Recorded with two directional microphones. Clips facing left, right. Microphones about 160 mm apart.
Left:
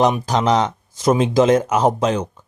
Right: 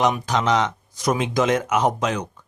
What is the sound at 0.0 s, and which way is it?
Speech, 35° left (ahead or behind).